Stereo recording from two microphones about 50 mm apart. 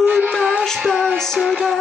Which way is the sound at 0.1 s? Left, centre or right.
Right.